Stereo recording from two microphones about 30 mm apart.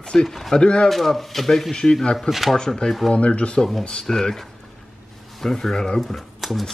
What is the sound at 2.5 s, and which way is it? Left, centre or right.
Speech, left.